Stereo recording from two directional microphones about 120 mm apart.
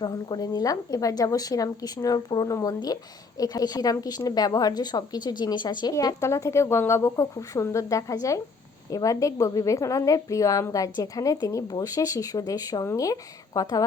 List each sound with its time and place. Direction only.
0.0 s a woman's voice: 35° left (ahead or behind)